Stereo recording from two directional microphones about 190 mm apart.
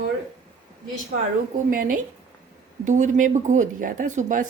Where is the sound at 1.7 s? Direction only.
45° right (ahead or behind).